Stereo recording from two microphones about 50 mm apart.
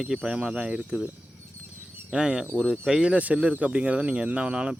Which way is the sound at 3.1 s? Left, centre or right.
Right.